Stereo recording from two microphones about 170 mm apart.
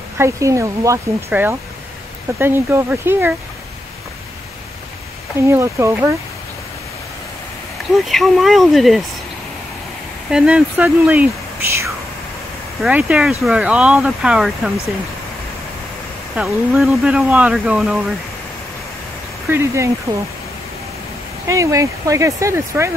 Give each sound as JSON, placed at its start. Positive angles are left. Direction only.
{"t": 0.2, "sound": "speech", "side_deg": -15}
{"t": 5.5, "sound": "speech", "side_deg": -15}
{"t": 7.9, "sound": "speech", "side_deg": 0}
{"t": 10.3, "sound": "speech", "side_deg": -5}
{"t": 12.8, "sound": "speech", "side_deg": -5}
{"t": 16.3, "sound": "speech", "side_deg": -5}
{"t": 19.5, "sound": "speech", "side_deg": -15}
{"t": 21.5, "sound": "speech", "side_deg": -20}